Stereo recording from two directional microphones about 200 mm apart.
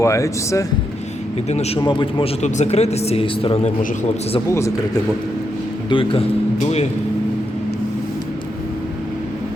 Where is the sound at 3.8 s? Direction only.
40° left (ahead or behind).